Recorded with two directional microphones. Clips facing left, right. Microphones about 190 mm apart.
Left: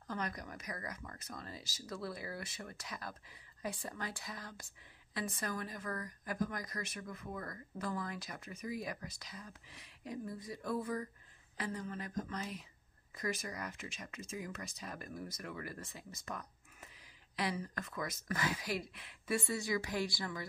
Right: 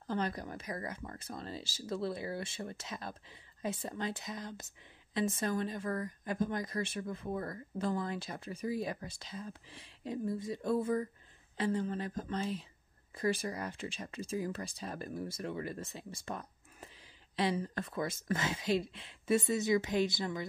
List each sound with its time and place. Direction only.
0.0 s speech: 30° right (ahead or behind)